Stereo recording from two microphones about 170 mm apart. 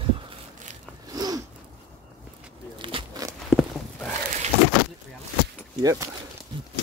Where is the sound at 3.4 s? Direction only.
Centre (ahead or behind).